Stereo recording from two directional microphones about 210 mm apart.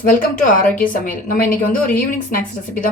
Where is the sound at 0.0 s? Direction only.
40° left (ahead or behind).